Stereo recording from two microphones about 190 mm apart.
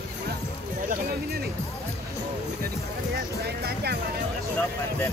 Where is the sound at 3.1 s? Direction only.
55° right (ahead or behind).